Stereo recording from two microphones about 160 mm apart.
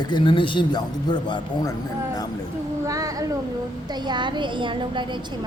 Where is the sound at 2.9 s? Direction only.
20° right (ahead or behind).